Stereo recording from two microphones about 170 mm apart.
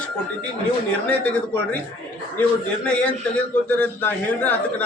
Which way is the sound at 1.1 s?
10° left (ahead or behind).